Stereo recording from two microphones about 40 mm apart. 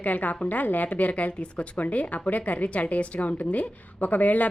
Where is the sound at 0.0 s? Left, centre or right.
Left.